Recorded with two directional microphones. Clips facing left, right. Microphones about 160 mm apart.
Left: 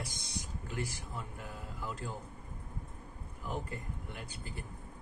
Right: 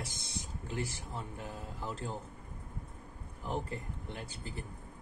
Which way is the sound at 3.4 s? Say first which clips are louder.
Right 2 dB; 30° right (ahead or behind).